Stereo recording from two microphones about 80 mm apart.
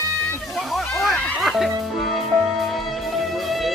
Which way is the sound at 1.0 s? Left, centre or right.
Centre.